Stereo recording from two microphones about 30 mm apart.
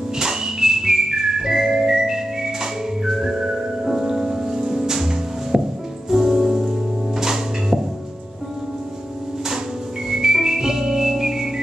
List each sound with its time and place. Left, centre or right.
0.2 s music: centre
5.5 s music: right
6.0 s music: centre
10.0 s music: centre